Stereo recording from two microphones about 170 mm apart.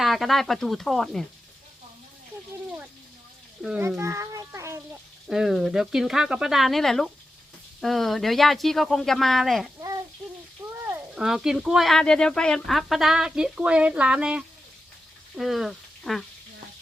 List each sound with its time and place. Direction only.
0.0 s speech: centre (ahead or behind)
3.8 s a child's voice: 15° right (ahead or behind)
5.3 s speech: centre (ahead or behind)
11.1 s speech: 5° right (ahead or behind)